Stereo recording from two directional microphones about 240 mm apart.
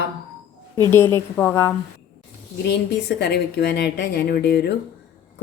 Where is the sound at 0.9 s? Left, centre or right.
Centre.